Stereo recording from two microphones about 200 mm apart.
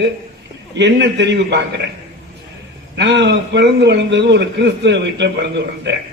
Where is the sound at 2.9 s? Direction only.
60° right (ahead or behind).